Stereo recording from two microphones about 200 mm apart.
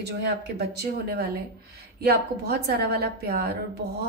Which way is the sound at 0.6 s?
50° right (ahead or behind).